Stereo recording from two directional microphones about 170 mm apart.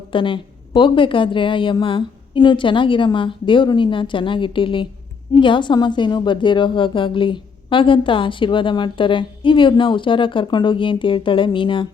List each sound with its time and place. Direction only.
0.1 s a woman's voice: 30° left (ahead or behind)